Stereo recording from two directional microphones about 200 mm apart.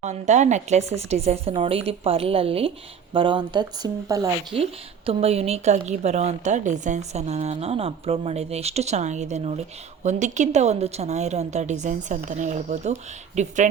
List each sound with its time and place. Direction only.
0.0 s speech: 35° right (ahead or behind); by 4.3 s 20° right (ahead or behind)
4.5 s a woman's voice: 30° right (ahead or behind)